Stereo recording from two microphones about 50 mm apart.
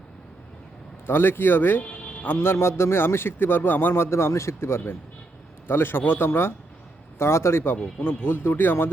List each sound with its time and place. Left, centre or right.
1.0 s a man's voice: left
7.2 s a man's voice: left